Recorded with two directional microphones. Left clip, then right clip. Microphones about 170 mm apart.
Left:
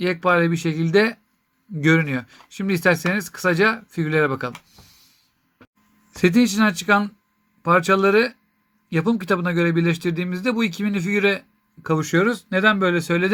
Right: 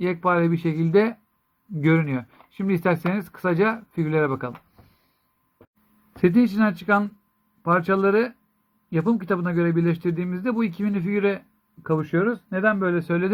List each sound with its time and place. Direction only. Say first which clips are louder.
0.0 s speech: left 3 dB; 5° left (ahead or behind)
6.2 s speech: left 2 dB; 10° left (ahead or behind)
11.9 s speech: left 4 dB; 25° left (ahead or behind)